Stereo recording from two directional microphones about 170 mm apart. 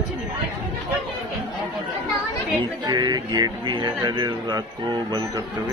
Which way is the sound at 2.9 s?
25° right (ahead or behind).